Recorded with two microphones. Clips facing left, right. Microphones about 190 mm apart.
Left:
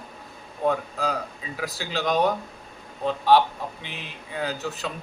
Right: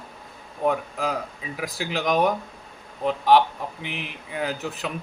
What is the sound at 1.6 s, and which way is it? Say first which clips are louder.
A man's voice: right 1 dB; 15° right (ahead or behind).